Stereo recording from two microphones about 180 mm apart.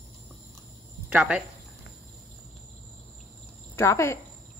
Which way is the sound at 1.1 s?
5° right (ahead or behind).